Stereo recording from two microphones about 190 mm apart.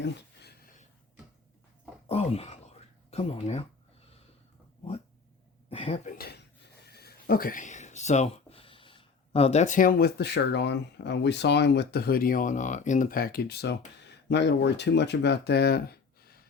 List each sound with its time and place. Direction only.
0.0 s a sound: 60° left (ahead or behind)
2.0 s speech: 35° left (ahead or behind)
5.6 s speech: 30° left (ahead or behind)
6.1 s speech: 60° left (ahead or behind)